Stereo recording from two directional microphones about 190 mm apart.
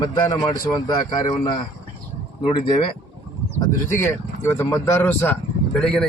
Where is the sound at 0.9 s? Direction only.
25° left (ahead or behind).